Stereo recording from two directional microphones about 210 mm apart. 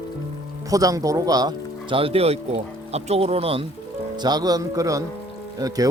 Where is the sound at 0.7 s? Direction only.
15° right (ahead or behind).